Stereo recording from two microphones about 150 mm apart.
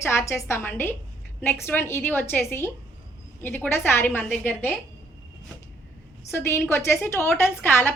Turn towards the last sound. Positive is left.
turn(degrees=15)  # may be behind; listen again after turning